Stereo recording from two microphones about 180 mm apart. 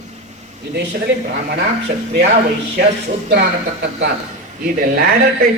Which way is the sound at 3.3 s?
65° right (ahead or behind).